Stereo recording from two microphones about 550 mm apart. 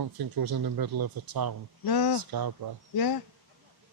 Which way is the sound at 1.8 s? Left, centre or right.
Left.